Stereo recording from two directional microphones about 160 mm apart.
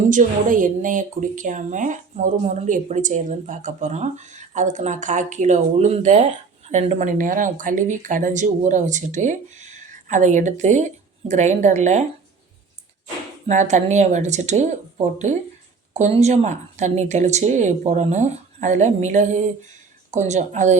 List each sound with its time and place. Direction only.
0.1 s a woman's voice: 55° right (ahead or behind)
13.5 s a woman's voice: 50° right (ahead or behind)